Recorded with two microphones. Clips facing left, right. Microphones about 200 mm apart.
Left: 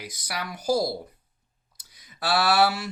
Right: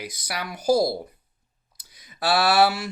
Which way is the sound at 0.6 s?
30° right (ahead or behind).